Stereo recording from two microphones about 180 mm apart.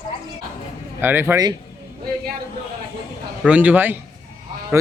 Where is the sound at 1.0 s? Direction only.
10° right (ahead or behind).